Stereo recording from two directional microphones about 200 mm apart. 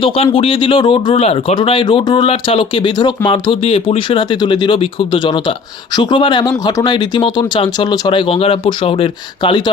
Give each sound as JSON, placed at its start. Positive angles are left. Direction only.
{"t": 0.0, "sound": "speech", "side_deg": 25}